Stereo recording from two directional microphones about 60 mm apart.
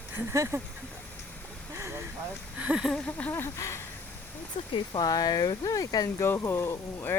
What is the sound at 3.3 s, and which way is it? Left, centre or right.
Speech, left.